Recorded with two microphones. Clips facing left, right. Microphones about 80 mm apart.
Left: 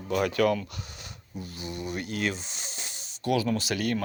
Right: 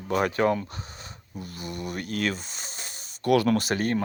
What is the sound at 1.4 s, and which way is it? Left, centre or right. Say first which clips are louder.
Speech: right 1 dB; right.